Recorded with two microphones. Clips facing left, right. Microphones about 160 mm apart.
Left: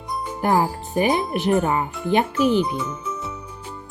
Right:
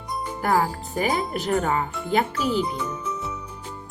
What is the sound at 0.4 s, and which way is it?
Speech, 20° left (ahead or behind).